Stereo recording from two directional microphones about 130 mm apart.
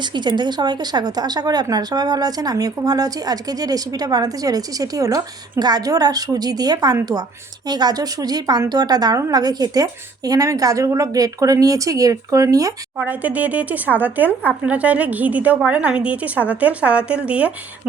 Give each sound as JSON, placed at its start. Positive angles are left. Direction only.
{"t": 0.0, "sound": "speech", "side_deg": -35}
{"t": 13.0, "sound": "speech", "side_deg": -10}